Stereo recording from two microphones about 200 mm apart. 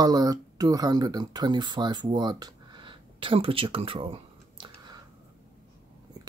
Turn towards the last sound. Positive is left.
turn(degrees=-25)  # may be behind; listen again after turning